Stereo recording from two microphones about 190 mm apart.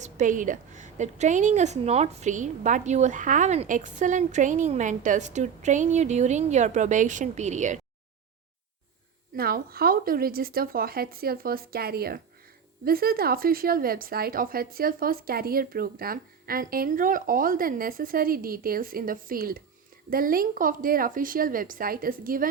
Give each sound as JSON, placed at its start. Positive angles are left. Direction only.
{"t": 0.0, "sound": "a woman's voice", "side_deg": -40}
{"t": 9.3, "sound": "a woman's voice", "side_deg": -50}